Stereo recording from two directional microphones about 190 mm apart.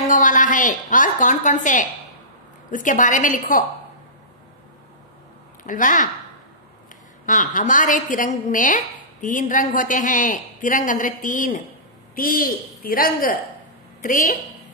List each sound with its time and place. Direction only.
0.1 s a woman's voice: 45° left (ahead or behind)
5.6 s speech: 45° left (ahead or behind)
7.2 s a woman's voice: 45° left (ahead or behind)